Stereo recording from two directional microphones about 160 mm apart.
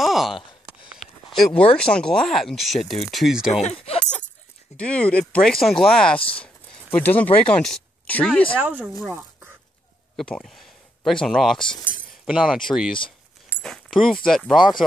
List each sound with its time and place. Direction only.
0.0 s a sound: centre (ahead or behind)
1.8 s speech: 5° left (ahead or behind)
3.6 s speech: 40° left (ahead or behind)
4.7 s speech: 5° left (ahead or behind)
6.1 s speech: 35° left (ahead or behind)
6.4 s a sound: 10° left (ahead or behind)
7.4 s speech: 5° left (ahead or behind)
8.5 s speech: 10° right (ahead or behind)
10.1 s speech: 5° left (ahead or behind)
13.6 s dog: centre (ahead or behind)
14.2 s speech: centre (ahead or behind)